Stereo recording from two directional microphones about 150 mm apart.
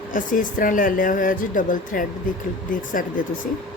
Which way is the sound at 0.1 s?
60° left (ahead or behind).